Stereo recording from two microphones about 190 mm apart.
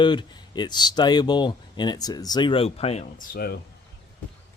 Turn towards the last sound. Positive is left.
turn(degrees=55)  # may be behind; listen again after turning